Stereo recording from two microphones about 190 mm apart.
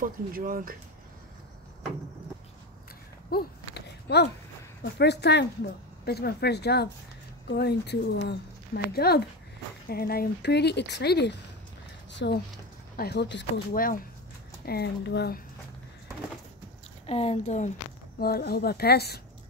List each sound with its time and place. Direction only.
0.0 s speech: 45° right (ahead or behind)
3.3 s a sound: 55° left (ahead or behind)
4.8 s speech: 60° left (ahead or behind)
12.9 s speech: 55° left (ahead or behind)
13.7 s speech: 50° left (ahead or behind)
14.7 s speech: 60° left (ahead or behind)
17.0 s speech: 35° left (ahead or behind)
18.2 s speech: 55° left (ahead or behind)